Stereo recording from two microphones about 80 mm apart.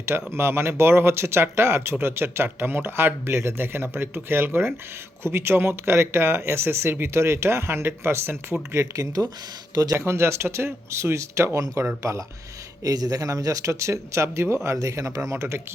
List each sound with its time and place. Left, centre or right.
0.3 s speech: right